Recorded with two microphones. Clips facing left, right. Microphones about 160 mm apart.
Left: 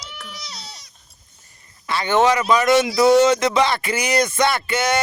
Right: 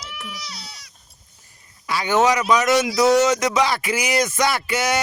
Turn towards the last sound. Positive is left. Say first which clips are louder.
# left 1 dB
turn(degrees=-5)  # may be behind; listen again after turning